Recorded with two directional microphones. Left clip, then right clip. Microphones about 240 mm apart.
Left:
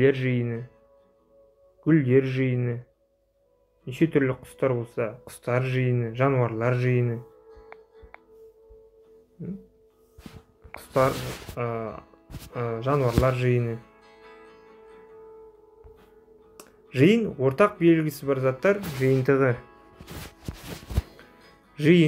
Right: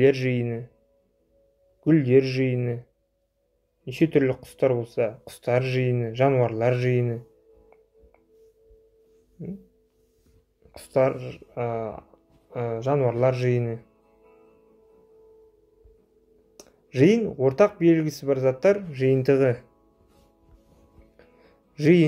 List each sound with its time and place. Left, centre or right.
0.0 s speech: centre
1.9 s speech: centre
3.8 s speech: centre
10.7 s speech: centre
14.0 s music: left
16.5 s speech: centre
21.7 s speech: centre